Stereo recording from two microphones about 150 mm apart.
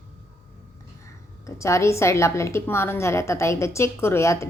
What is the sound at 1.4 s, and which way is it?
A woman's voice, 20° left (ahead or behind).